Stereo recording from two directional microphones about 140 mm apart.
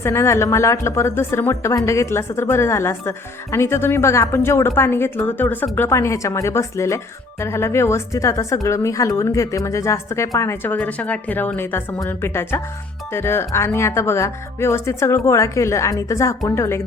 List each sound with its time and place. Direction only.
0.0 s a woman's voice: 20° left (ahead or behind)